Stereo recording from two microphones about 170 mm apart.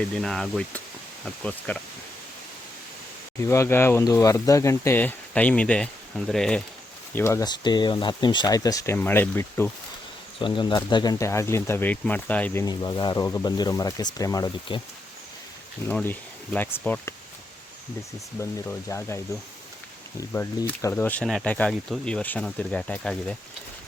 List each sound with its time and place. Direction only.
0.1 s speech: centre (ahead or behind)
3.4 s speech: 15° left (ahead or behind)
7.1 s speech: 15° left (ahead or behind)
10.4 s speech: 30° left (ahead or behind); by 12.6 s 10° left (ahead or behind)
12.6 s speech: 25° left (ahead or behind)
15.9 s speech: 5° left (ahead or behind)
18.9 s speech: 15° left (ahead or behind)